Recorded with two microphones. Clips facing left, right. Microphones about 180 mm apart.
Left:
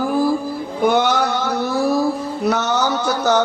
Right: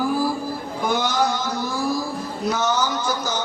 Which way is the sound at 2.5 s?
65° left (ahead or behind).